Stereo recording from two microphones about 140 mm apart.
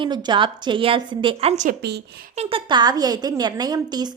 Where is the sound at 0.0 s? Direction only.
30° right (ahead or behind).